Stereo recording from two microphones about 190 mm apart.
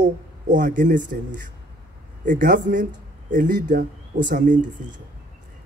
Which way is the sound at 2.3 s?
45° right (ahead or behind).